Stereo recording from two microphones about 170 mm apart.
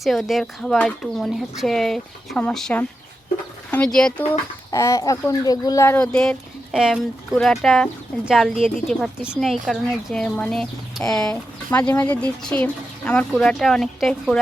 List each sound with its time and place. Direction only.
0.0 s speech: centre (ahead or behind)
4.7 s speech: 15° left (ahead or behind); by 14.3 s centre (ahead or behind)